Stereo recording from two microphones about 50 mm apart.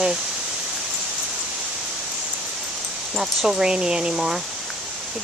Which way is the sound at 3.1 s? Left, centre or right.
Centre.